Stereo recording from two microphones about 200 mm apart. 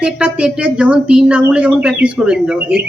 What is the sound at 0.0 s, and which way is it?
A woman's voice, 5° right (ahead or behind).